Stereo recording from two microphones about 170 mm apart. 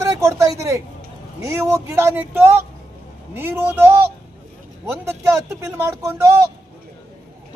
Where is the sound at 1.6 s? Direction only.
15° right (ahead or behind).